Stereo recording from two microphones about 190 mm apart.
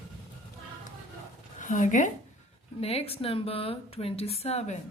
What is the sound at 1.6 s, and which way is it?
A woman's voice, 40° left (ahead or behind).